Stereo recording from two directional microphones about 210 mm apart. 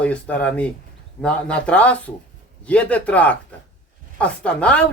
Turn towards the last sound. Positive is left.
turn(degrees=5)  # may be behind; listen again after turning